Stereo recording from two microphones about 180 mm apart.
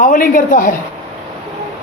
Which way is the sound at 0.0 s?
50° left (ahead or behind).